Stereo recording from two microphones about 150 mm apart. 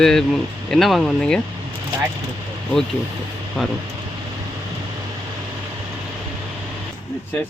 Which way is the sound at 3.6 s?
Centre (ahead or behind).